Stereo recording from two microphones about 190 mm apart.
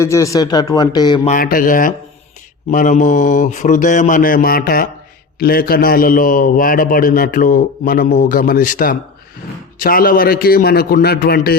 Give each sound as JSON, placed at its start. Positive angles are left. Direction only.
{"t": 0.0, "sound": "a man's voice", "side_deg": 15}
{"t": 1.3, "sound": "a man's voice", "side_deg": 50}